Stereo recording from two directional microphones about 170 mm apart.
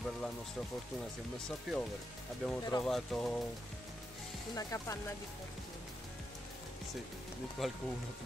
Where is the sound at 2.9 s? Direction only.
Centre (ahead or behind).